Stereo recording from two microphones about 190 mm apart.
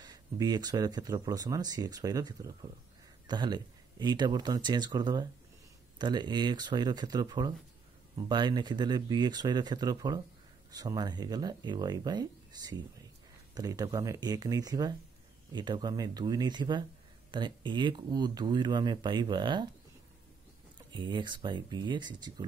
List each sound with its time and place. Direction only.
0.0 s speech: 20° right (ahead or behind)
20.9 s speech: 25° right (ahead or behind)